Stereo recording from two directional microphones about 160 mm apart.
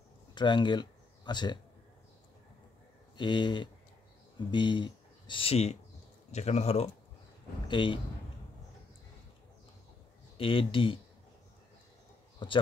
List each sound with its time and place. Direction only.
0.3 s speech: 30° left (ahead or behind)
3.2 s speech: 30° left (ahead or behind)
7.6 s speech: 30° left (ahead or behind)
10.3 s speech: 35° left (ahead or behind)
12.4 s speech: 30° left (ahead or behind)